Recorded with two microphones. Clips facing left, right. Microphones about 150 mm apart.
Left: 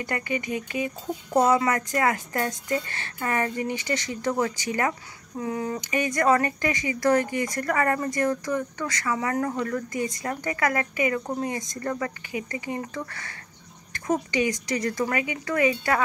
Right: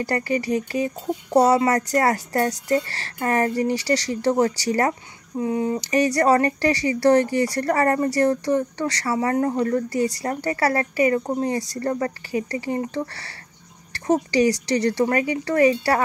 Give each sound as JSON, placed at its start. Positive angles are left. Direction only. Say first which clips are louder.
{"t": 0.0, "sound": "speech", "louder": "right 6 dB", "side_deg": -35}
{"t": 5.4, "sound": "a sound", "louder": "right 6 dB", "side_deg": -25}
{"t": 5.8, "sound": "speech", "louder": "right 6 dB", "side_deg": -35}